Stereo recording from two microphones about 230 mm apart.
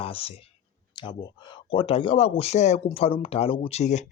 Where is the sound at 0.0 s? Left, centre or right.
Left.